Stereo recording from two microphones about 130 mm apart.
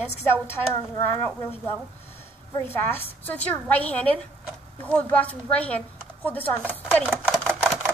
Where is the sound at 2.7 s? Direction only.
15° left (ahead or behind).